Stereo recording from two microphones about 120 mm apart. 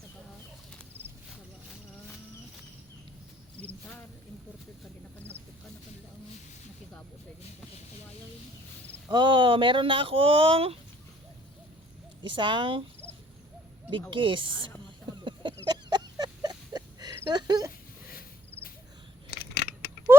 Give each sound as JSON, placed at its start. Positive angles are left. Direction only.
{"t": 3.6, "sound": "cricket", "side_deg": 15}
{"t": 9.0, "sound": "speech", "side_deg": -40}
{"t": 12.2, "sound": "speech", "side_deg": -45}
{"t": 14.1, "sound": "speech", "side_deg": -45}
{"t": 15.2, "sound": "a sound", "side_deg": -40}